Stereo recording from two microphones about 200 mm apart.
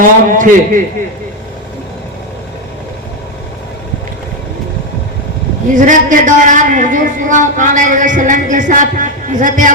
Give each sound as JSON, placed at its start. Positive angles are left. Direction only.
{"t": 0.0, "sound": "a woman's voice", "side_deg": -40}
{"t": 5.7, "sound": "a woman's voice", "side_deg": -40}